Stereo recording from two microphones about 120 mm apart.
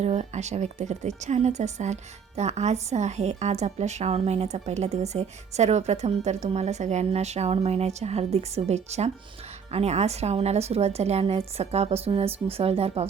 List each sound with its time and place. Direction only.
0.0 s a woman's voice: 70° right (ahead or behind)